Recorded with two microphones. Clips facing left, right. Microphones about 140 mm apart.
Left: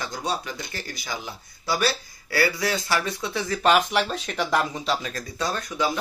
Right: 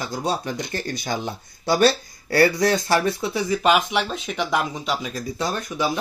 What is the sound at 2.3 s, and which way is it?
Speech, 45° right (ahead or behind).